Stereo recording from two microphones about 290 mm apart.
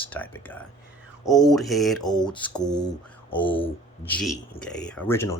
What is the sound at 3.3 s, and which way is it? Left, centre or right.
Speech, centre.